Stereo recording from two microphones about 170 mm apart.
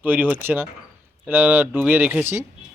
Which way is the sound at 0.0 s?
10° right (ahead or behind).